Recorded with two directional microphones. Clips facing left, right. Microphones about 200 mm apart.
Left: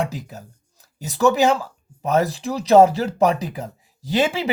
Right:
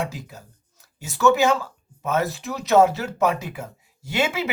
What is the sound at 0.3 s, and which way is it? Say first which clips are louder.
Speech: left 5 dB; 35° left (ahead or behind).